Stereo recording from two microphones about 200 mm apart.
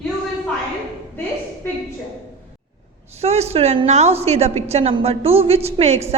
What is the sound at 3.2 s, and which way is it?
A woman's voice, 30° right (ahead or behind).